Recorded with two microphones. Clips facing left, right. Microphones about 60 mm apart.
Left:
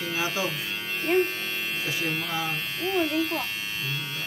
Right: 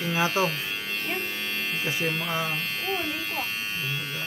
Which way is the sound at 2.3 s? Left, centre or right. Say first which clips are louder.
Right 1 dB; centre.